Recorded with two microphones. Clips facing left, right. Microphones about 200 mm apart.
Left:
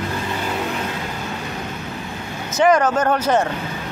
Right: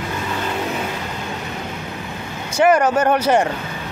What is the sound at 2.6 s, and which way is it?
Speech, 10° right (ahead or behind).